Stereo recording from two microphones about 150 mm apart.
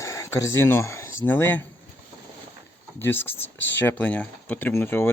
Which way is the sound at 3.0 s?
15° left (ahead or behind).